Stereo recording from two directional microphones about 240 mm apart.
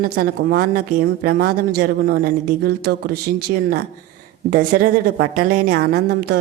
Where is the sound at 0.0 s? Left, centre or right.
Right.